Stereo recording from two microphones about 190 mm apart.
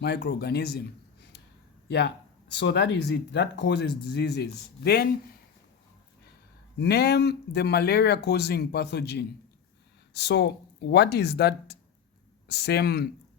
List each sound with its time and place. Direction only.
0.0 s speech: 60° left (ahead or behind)
1.9 s speech: 60° left (ahead or behind)
6.7 s speech: 60° left (ahead or behind)